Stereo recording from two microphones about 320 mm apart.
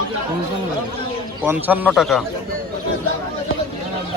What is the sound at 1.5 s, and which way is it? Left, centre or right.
Speech, centre.